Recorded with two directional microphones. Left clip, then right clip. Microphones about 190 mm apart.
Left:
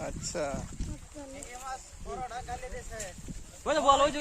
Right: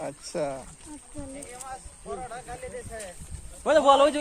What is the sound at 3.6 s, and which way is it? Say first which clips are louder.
Speech: right 6 dB; 60° right (ahead or behind).